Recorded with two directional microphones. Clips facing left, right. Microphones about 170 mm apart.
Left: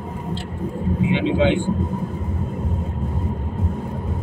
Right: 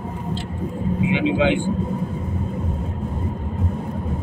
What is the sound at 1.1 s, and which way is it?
Speech, 5° right (ahead or behind).